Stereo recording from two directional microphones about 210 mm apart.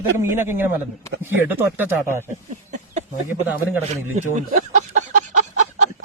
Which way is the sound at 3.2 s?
10° right (ahead or behind).